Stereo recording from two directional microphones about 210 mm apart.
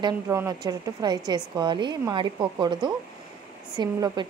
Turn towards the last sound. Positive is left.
turn(degrees=-20)  # may be behind; listen again after turning